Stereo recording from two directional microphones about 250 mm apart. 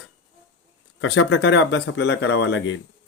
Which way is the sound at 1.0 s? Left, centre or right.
Left.